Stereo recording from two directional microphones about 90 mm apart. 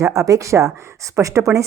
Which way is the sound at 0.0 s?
35° right (ahead or behind).